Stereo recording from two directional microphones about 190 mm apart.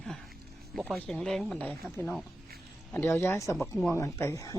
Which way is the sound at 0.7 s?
Centre (ahead or behind).